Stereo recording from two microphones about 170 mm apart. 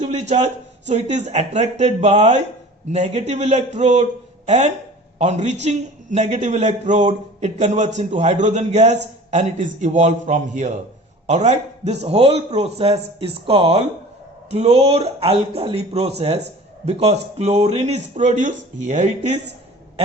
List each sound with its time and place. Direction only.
0.0 s a man's voice: 45° right (ahead or behind)